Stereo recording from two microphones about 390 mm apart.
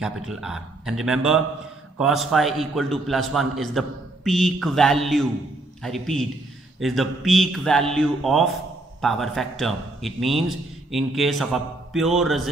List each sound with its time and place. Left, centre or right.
0.0 s a man's voice: centre